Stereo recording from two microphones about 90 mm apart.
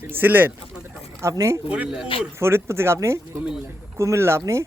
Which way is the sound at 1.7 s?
10° right (ahead or behind).